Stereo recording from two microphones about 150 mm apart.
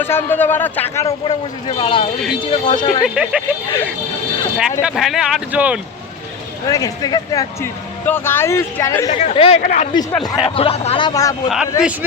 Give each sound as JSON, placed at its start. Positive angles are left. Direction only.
{"t": 0.0, "sound": "speech", "side_deg": 15}
{"t": 1.0, "sound": "speech", "side_deg": 30}
{"t": 2.7, "sound": "speech", "side_deg": 50}
{"t": 3.0, "sound": "speech", "side_deg": -5}
{"t": 4.8, "sound": "speech", "side_deg": -5}
{"t": 6.7, "sound": "speech", "side_deg": 25}
{"t": 9.1, "sound": "speech", "side_deg": 45}
{"t": 9.6, "sound": "speech", "side_deg": 55}
{"t": 9.9, "sound": "speech", "side_deg": 25}
{"t": 10.4, "sound": "speech", "side_deg": 40}
{"t": 11.1, "sound": "speech", "side_deg": 25}
{"t": 11.4, "sound": "speech", "side_deg": -5}